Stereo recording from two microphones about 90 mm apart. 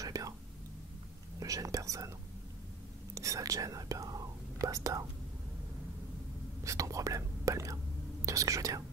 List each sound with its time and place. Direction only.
0.0 s whispering: 40° right (ahead or behind)
1.4 s speech: 40° right (ahead or behind)
3.2 s speech: 40° right (ahead or behind)
6.6 s speech: 35° right (ahead or behind)